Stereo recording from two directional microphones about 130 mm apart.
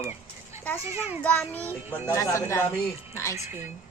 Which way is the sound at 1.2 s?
15° left (ahead or behind).